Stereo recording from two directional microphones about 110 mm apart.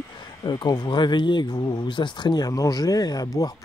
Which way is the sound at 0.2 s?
40° left (ahead or behind).